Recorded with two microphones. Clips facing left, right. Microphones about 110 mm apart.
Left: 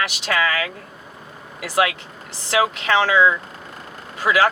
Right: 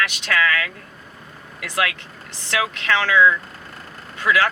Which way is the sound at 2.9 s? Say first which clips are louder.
Even; 25° left (ahead or behind).